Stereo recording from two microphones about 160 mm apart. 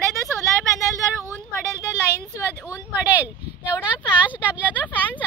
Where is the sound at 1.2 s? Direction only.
15° right (ahead or behind).